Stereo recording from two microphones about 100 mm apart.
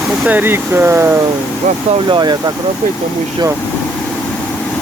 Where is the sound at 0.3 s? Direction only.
20° right (ahead or behind).